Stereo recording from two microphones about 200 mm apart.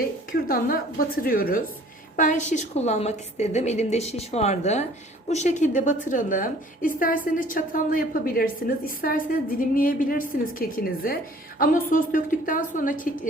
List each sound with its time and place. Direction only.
0.3 s a woman's voice: 45° left (ahead or behind)